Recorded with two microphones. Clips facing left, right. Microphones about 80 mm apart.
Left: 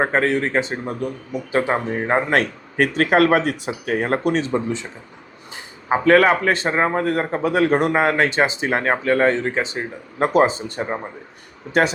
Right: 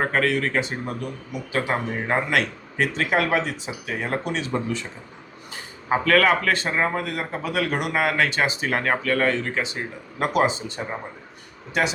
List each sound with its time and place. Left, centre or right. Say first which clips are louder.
0.0 s a man's voice: left 3 dB; left
2.3 s speech: left 4 dB; left
4.5 s a man's voice: left 4 dB; left
5.9 s a man's voice: left 4 dB; left